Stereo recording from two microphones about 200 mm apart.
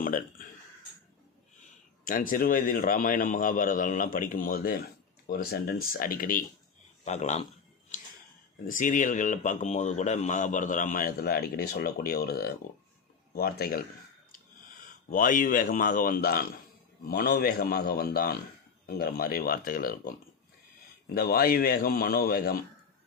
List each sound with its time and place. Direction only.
0.0 s speech: 45° left (ahead or behind)
2.0 s a man's voice: 40° left (ahead or behind)
8.6 s a man's voice: 40° left (ahead or behind)